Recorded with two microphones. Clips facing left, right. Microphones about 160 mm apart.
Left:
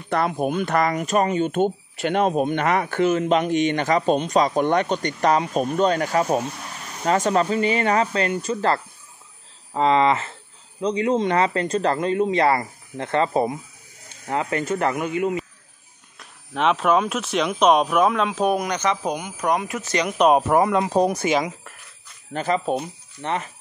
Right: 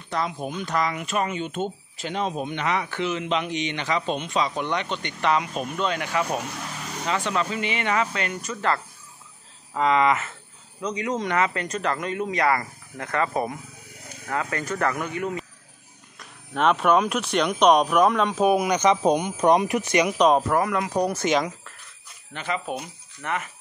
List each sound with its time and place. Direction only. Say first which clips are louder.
0.1 s speech: left 6 dB; 60° left (ahead or behind)
0.9 s speech: left 6 dB; 40° left (ahead or behind); by 15.4 s 20° left (ahead or behind)
16.2 s speech: even; centre (ahead or behind)
20.1 s speech: left 4 dB; 5° left (ahead or behind)
20.4 s speech: left 4 dB; 25° left (ahead or behind)
21.1 s speech: left 1 dB; 10° left (ahead or behind)
22.3 s speech: left 7 dB; 40° left (ahead or behind)